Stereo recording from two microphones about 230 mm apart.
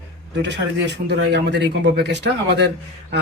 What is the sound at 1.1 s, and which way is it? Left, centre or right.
Speech, right.